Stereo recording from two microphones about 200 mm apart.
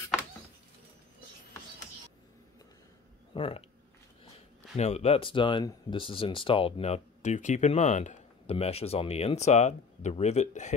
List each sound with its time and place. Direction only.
3.3 s speech: 25° left (ahead or behind)
4.7 s speech: 35° left (ahead or behind)